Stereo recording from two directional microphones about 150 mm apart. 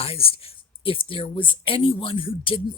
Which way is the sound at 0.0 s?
40° left (ahead or behind).